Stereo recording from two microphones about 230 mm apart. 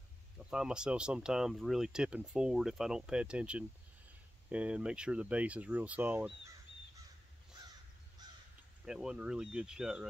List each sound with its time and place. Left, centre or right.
0.4 s speech: centre
8.2 s crow: centre
8.8 s speech: centre